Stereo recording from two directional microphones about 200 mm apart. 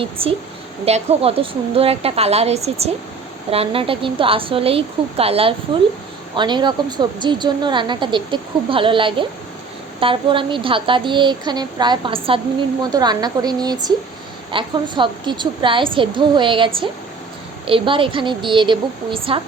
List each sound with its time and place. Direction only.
0.0 s a woman's voice: 30° right (ahead or behind)